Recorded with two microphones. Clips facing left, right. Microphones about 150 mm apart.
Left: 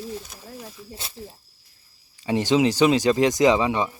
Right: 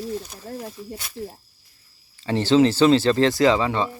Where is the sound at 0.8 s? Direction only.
20° right (ahead or behind).